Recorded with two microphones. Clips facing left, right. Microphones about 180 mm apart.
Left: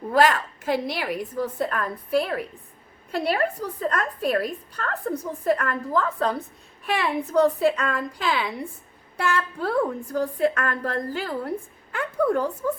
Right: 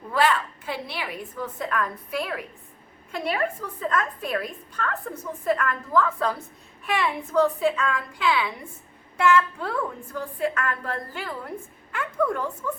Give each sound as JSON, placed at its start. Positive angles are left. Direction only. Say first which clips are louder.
{"t": 0.1, "sound": "a woman's voice", "louder": "left 3 dB", "side_deg": 45}